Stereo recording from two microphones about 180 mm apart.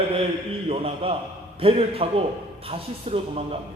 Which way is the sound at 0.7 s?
30° right (ahead or behind).